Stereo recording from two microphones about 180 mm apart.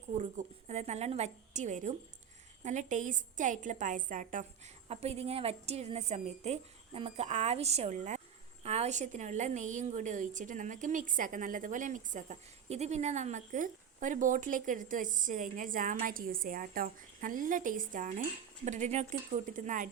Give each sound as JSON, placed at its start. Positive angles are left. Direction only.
{"t": 0.2, "sound": "a woman's voice", "side_deg": -40}